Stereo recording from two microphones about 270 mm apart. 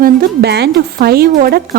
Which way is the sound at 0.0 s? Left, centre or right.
Right.